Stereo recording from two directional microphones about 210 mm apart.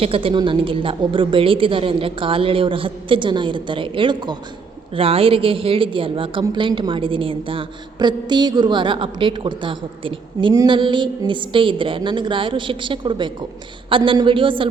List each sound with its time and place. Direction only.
0.0 s a woman's voice: 25° right (ahead or behind)